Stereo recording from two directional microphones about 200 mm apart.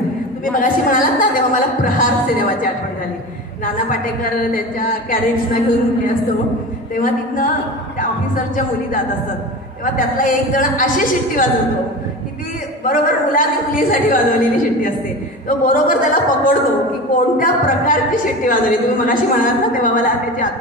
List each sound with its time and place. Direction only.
0.5 s a woman's voice: 40° left (ahead or behind)
7.0 s a woman's voice: 40° left (ahead or behind)
12.8 s a woman's voice: 45° left (ahead or behind)